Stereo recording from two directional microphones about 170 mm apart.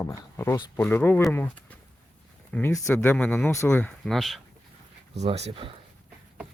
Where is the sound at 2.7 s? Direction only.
15° left (ahead or behind).